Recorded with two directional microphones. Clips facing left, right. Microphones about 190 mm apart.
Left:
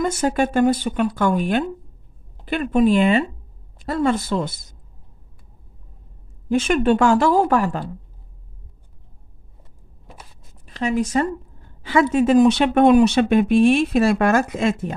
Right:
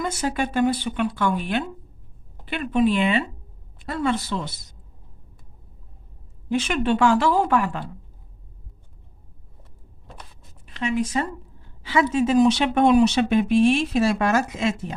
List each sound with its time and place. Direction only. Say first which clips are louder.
0.0 s a woman's voice: left 5 dB; 50° left (ahead or behind)
6.5 s a woman's voice: left 5 dB; 45° left (ahead or behind)
10.6 s a woman's voice: left 3 dB; 40° left (ahead or behind)